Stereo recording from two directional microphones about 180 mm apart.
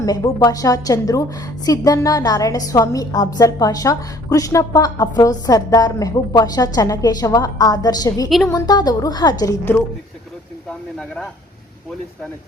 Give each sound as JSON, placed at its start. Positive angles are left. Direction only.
{"t": 0.0, "sound": "a woman's voice", "side_deg": 20}
{"t": 10.7, "sound": "speech", "side_deg": 5}